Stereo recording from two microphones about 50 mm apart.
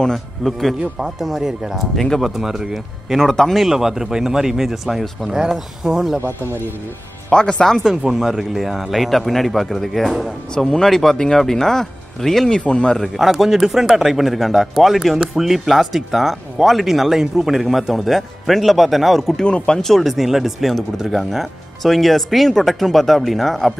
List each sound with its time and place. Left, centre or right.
0.0 s speech: centre
2.0 s speech: centre
3.2 s speech: centre
3.6 s speech: centre
7.2 s speech: centre
7.8 s speech: centre
10.5 s speech: centre
12.9 s speech: centre
13.3 s speech: centre
19.4 s speech: centre